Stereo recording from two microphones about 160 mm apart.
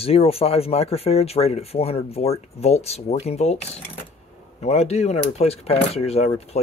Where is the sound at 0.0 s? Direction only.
40° left (ahead or behind).